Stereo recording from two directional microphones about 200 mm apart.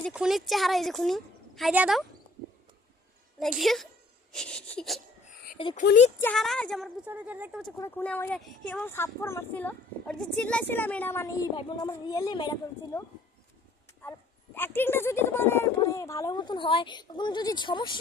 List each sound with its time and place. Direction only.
0.0 s speech: centre (ahead or behind)
3.4 s speech: centre (ahead or behind)
5.6 s speech: 25° left (ahead or behind)
6.2 s speech: centre (ahead or behind)
7.0 s speech: 5° right (ahead or behind)
7.8 s speech: 10° left (ahead or behind)